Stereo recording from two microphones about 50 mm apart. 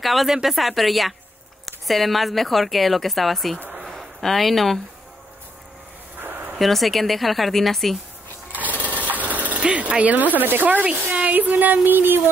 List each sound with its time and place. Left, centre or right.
0.0 s a woman's voice: centre
6.2 s a sound: right
6.5 s a woman's voice: centre
8.5 s sewing machine: right
8.8 s a sound: right
9.6 s speech: right